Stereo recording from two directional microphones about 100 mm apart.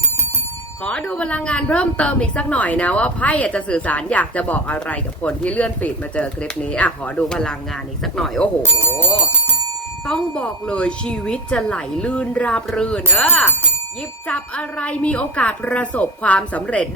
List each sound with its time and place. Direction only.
0.9 s a woman's voice: 10° left (ahead or behind)
8.9 s speech: 25° left (ahead or behind)
10.1 s a woman's voice: 10° left (ahead or behind)